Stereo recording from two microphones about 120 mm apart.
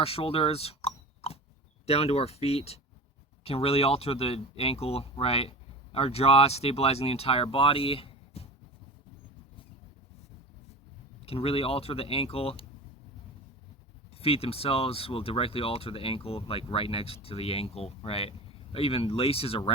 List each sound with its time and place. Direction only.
0.0 s speech: 55° left (ahead or behind)
11.3 s speech: 55° left (ahead or behind)
14.2 s speech: 55° left (ahead or behind)